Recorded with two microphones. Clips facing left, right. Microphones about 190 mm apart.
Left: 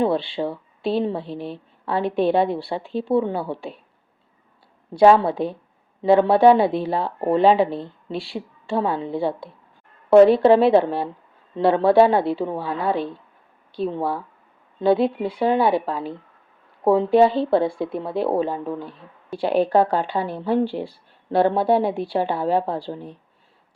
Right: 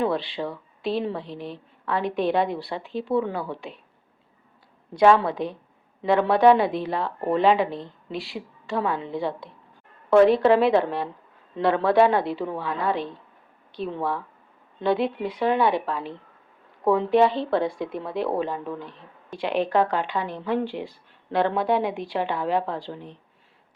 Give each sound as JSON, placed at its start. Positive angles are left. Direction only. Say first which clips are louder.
{"t": 0.0, "sound": "speech", "louder": "left 4 dB", "side_deg": 30}
{"t": 4.9, "sound": "speech", "louder": "left 4 dB", "side_deg": 30}